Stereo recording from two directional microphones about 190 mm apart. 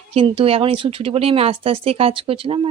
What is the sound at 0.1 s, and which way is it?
A woman's voice, 30° right (ahead or behind).